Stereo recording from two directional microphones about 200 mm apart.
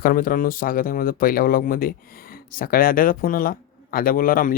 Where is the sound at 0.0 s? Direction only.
45° left (ahead or behind).